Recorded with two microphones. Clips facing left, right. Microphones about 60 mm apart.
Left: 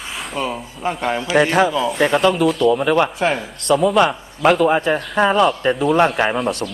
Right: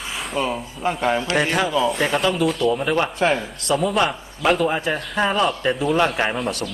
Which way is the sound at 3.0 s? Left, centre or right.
Centre.